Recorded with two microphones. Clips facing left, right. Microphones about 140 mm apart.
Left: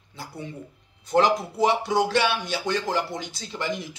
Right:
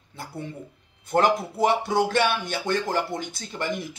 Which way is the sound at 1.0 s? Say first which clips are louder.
Left 1 dB; 50° right (ahead or behind).